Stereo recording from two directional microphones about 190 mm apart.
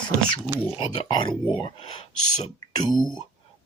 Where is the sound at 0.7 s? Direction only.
30° left (ahead or behind).